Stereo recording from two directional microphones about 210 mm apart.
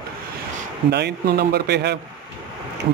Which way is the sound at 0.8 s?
50° right (ahead or behind).